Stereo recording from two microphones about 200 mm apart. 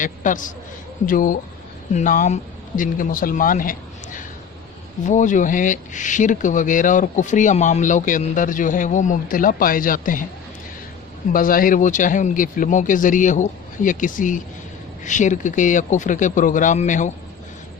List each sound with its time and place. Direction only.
0.0 s speech: 40° left (ahead or behind)
11.3 s speech: 45° left (ahead or behind)